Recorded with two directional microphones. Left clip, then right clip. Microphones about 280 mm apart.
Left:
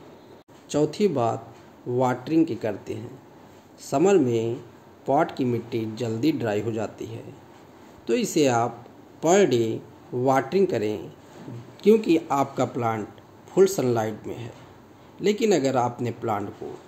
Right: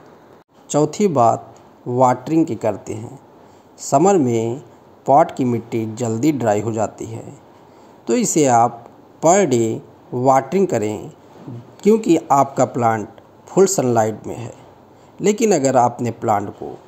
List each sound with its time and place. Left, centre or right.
0.7 s speech: centre